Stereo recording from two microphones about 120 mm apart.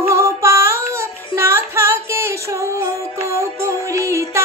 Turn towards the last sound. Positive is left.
turn(degrees=-25)  # may be behind; listen again after turning